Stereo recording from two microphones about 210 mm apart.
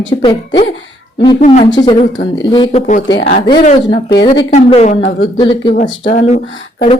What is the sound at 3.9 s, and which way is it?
A woman's voice, 20° left (ahead or behind).